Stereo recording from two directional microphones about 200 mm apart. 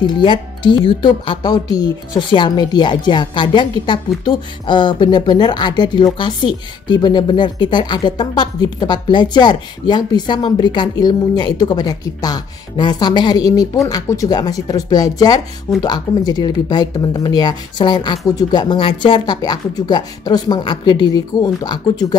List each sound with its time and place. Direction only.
0.0 s a woman's voice: 25° left (ahead or behind)